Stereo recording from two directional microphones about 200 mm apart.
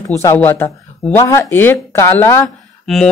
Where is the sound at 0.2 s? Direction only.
10° left (ahead or behind).